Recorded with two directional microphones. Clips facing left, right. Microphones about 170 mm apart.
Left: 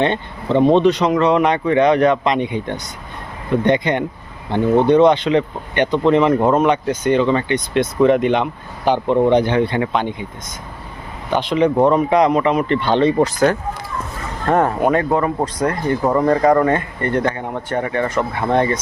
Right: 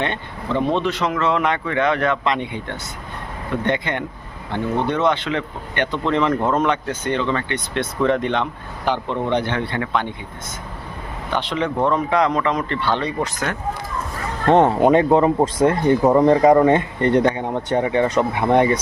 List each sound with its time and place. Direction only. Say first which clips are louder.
0.0 s speech: left 6 dB; 20° left (ahead or behind)
11.3 s speech: left 7 dB; 15° left (ahead or behind); by 13.6 s 35° left (ahead or behind)
14.5 s speech: right 2 dB; 20° right (ahead or behind)